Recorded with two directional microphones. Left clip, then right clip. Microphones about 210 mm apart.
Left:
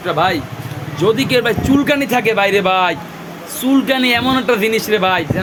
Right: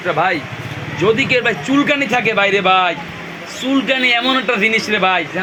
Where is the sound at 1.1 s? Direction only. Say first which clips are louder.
Right 1 dB; 50° left (ahead or behind).